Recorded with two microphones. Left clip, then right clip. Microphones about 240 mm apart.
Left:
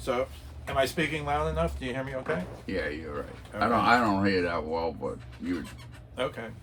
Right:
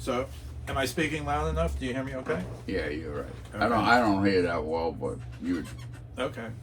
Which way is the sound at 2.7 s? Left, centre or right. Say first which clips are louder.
Right 1 dB; centre.